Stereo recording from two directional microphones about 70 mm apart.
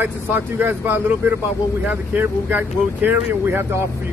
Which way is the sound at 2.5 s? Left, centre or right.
Right.